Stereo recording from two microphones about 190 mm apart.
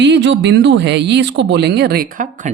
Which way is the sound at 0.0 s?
65° right (ahead or behind).